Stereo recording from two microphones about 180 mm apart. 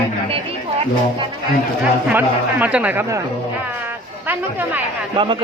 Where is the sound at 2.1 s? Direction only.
10° right (ahead or behind).